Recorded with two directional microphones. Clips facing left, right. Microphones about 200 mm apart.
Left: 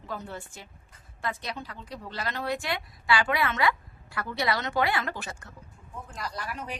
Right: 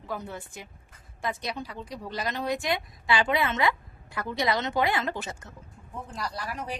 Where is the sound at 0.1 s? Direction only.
15° right (ahead or behind).